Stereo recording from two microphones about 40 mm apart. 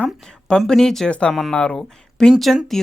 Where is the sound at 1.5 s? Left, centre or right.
Centre.